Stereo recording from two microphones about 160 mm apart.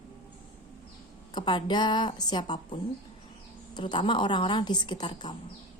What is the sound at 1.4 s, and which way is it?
A woman's voice, 30° left (ahead or behind).